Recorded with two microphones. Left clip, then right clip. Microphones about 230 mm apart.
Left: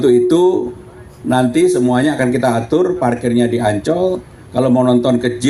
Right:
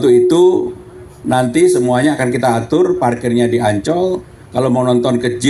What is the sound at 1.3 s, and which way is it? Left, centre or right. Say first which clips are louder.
A man's voice: right 1 dB; right.